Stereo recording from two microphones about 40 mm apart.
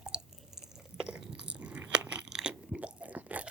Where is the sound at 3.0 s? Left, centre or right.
Right.